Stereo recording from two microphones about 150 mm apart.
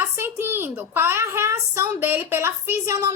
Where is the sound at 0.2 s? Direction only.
15° right (ahead or behind).